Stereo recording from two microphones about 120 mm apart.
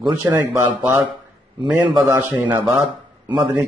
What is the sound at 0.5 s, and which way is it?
Speech, 25° right (ahead or behind).